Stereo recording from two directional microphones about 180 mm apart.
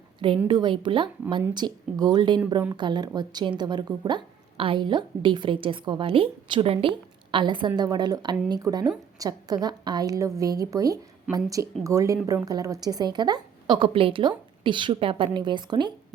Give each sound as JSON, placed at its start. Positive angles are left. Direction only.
{"t": 0.4, "sound": "a woman's voice", "side_deg": -25}